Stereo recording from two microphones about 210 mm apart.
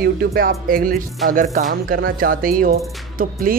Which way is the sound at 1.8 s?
45° right (ahead or behind).